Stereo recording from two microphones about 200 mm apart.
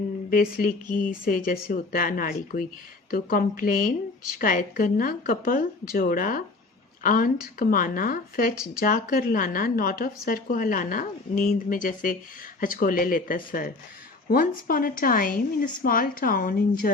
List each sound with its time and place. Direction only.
0.3 s a woman's voice: 45° left (ahead or behind)